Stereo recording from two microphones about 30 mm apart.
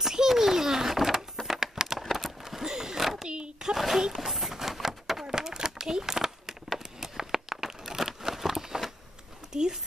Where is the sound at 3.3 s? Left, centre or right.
Right.